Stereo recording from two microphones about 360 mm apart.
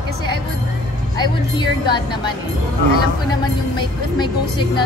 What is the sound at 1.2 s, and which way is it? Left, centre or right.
A woman's voice, centre.